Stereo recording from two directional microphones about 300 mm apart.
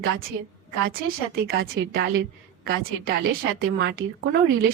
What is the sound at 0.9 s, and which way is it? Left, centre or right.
A woman's voice, right.